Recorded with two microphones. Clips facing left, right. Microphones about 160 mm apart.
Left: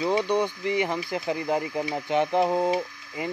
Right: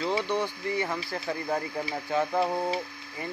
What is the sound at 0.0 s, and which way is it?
Speech, 20° left (ahead or behind).